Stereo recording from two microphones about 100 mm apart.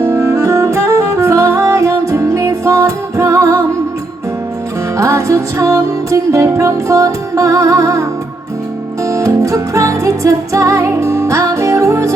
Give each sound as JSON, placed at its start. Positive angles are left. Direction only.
{"t": 0.0, "sound": "music", "side_deg": -25}
{"t": 4.9, "sound": "music", "side_deg": -30}
{"t": 9.0, "sound": "music", "side_deg": -30}